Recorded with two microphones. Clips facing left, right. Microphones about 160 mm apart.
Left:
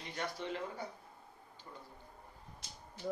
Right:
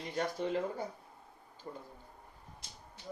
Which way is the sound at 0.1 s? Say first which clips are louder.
Right 6 dB; 40° right (ahead or behind).